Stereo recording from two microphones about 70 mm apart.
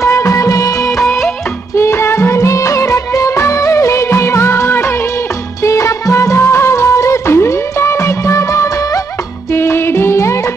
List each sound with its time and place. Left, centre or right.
0.0 s music of bollywood: left
9.5 s music: left